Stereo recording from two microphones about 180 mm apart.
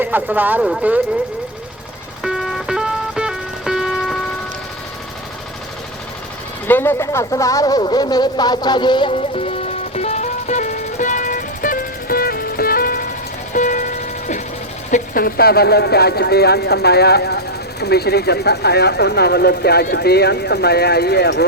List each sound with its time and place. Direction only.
0.0 s speech: 10° right (ahead or behind)
2.2 s music: centre (ahead or behind)
6.7 s a sound: 10° left (ahead or behind); by 13.0 s 55° left (ahead or behind)
13.5 s music: 45° left (ahead or behind)
14.8 s speech: 50° left (ahead or behind); by 21.4 s 65° left (ahead or behind)